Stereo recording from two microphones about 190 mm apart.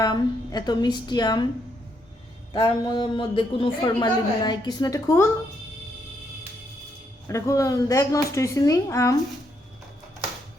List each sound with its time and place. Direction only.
0.0 s a man's voice: 20° left (ahead or behind)
2.5 s a man's voice: 20° left (ahead or behind)
7.3 s speech: 15° left (ahead or behind)